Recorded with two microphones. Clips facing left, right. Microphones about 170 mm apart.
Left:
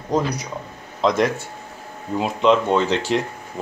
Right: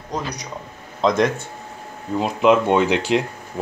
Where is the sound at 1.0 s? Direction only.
5° left (ahead or behind).